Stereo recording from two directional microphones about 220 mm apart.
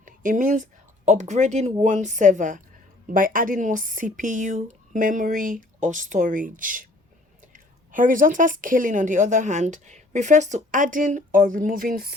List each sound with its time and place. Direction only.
0.0 s a woman's voice: 35° right (ahead or behind)